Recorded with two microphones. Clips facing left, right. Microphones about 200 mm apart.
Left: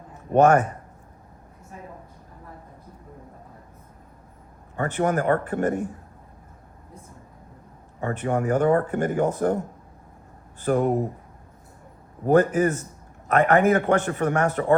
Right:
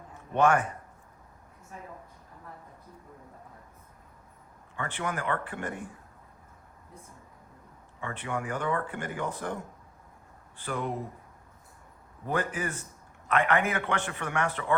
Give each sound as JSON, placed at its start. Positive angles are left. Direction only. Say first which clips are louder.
{"t": 0.3, "sound": "a man's voice", "louder": "left 7 dB", "side_deg": 40}
{"t": 4.8, "sound": "speech", "louder": "left 11 dB", "side_deg": 45}
{"t": 8.0, "sound": "speech", "louder": "left 10 dB", "side_deg": 45}
{"t": 12.2, "sound": "speech", "louder": "left 13 dB", "side_deg": 45}